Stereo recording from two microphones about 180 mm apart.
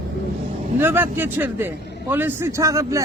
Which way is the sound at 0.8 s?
10° right (ahead or behind).